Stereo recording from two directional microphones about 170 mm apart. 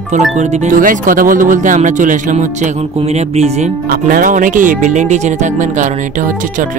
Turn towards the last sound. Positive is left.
turn(degrees=-45)  # may be behind; listen again after turning